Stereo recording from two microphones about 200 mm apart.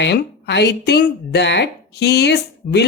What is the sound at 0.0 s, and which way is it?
Speech, 60° left (ahead or behind).